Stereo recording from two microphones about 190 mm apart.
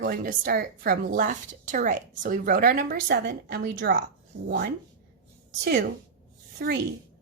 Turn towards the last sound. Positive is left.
turn(degrees=-55)  # may be behind; listen again after turning